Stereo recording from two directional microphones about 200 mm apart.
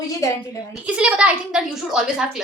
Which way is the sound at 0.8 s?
5° right (ahead or behind).